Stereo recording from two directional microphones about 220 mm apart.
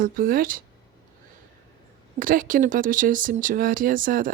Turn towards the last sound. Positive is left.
turn(degrees=-40)  # may be behind; listen again after turning